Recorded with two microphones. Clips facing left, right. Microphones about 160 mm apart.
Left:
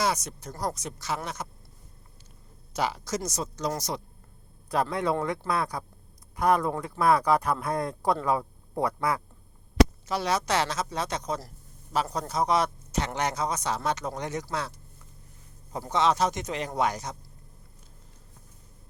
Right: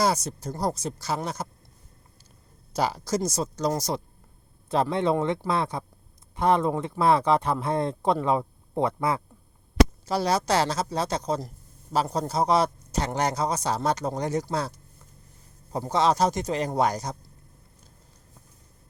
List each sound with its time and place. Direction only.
0.0 s speech: 30° right (ahead or behind)
2.7 s speech: 35° right (ahead or behind)
15.9 s speech: 35° right (ahead or behind)